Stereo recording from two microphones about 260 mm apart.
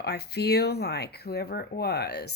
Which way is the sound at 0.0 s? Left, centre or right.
Left.